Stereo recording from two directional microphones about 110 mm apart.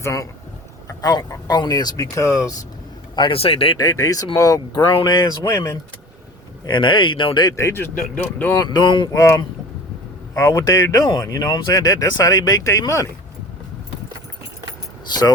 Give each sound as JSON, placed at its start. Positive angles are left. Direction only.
{"t": 0.0, "sound": "speech", "side_deg": 30}
{"t": 3.2, "sound": "speech", "side_deg": 55}
{"t": 3.8, "sound": "speech", "side_deg": 35}
{"t": 6.7, "sound": "speech", "side_deg": 45}
{"t": 7.5, "sound": "speech", "side_deg": 25}
{"t": 8.5, "sound": "speech", "side_deg": 40}
{"t": 9.1, "sound": "speech", "side_deg": 30}
{"t": 15.0, "sound": "speech", "side_deg": 40}